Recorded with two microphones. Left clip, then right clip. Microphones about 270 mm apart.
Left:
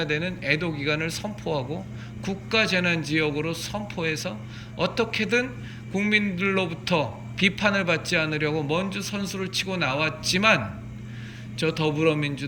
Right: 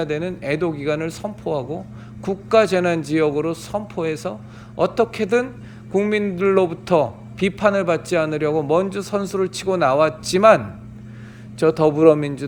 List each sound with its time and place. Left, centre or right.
0.0 s speech: centre